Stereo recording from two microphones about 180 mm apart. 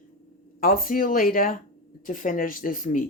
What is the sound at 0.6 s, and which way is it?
Speech, 55° left (ahead or behind).